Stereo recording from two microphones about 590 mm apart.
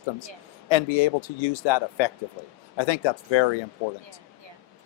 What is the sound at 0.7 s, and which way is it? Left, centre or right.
Speech, left.